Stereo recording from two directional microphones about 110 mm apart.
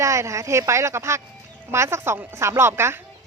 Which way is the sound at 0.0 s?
25° right (ahead or behind).